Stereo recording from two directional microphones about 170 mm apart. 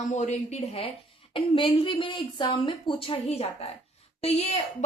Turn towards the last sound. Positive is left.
turn(degrees=40)  # may be behind; listen again after turning